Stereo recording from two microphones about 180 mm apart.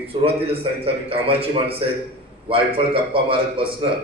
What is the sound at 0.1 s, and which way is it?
A man's voice, 35° right (ahead or behind).